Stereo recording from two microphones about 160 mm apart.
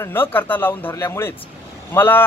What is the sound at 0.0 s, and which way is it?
Speech, 15° left (ahead or behind).